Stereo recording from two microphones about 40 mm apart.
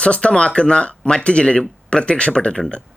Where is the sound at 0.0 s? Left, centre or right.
Left.